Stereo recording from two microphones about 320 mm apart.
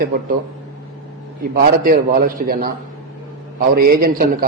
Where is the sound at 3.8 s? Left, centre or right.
Right.